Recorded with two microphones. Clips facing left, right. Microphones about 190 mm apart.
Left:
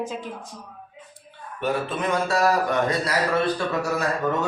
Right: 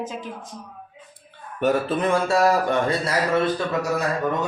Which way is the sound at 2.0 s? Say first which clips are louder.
Right 2 dB; 30° right (ahead or behind).